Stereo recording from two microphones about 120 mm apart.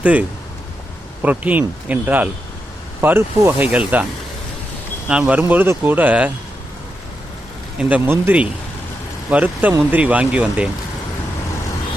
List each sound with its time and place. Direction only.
0.0 s speech: 10° right (ahead or behind)
5.0 s speech: 10° right (ahead or behind)
7.8 s speech: 10° right (ahead or behind)